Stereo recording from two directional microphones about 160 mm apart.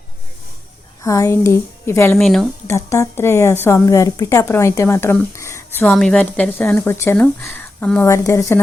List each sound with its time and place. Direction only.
1.0 s a woman's voice: 20° left (ahead or behind)
2.1 s speech: centre (ahead or behind)
2.6 s a woman's voice: 15° left (ahead or behind)
5.9 s a woman's voice: 5° left (ahead or behind)